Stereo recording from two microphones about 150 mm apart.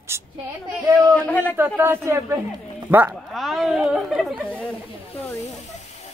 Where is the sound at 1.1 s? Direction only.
10° left (ahead or behind).